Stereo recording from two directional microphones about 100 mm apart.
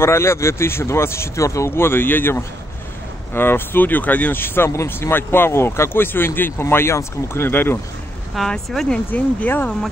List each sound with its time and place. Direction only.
0.0 s speech: 25° left (ahead or behind)
8.4 s speech: 5° left (ahead or behind)